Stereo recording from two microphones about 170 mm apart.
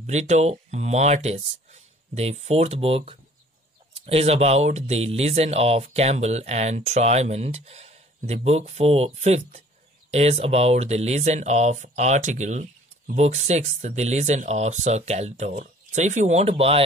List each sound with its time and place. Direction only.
0.0 s speech: 40° right (ahead or behind)